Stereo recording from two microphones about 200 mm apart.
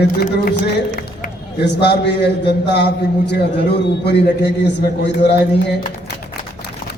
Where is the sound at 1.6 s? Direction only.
55° left (ahead or behind).